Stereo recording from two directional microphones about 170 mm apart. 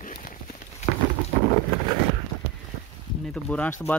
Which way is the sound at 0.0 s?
55° left (ahead or behind).